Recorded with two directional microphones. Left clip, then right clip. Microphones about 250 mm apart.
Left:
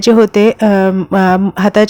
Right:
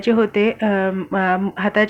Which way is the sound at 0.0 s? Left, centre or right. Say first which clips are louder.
Left 8 dB; left.